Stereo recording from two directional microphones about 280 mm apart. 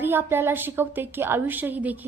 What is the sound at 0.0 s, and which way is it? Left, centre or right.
A woman's voice, centre.